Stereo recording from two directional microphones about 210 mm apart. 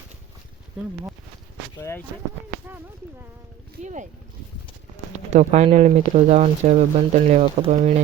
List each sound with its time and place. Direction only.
1.8 s speech: 10° left (ahead or behind)
3.8 s speech: 35° right (ahead or behind)
5.1 s speech: 35° right (ahead or behind)